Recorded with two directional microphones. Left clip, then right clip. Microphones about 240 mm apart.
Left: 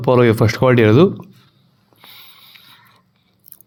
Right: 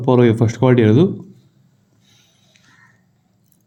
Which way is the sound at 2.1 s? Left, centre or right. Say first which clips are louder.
Left 12 dB; centre.